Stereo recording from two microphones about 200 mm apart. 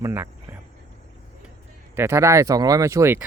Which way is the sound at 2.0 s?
15° right (ahead or behind).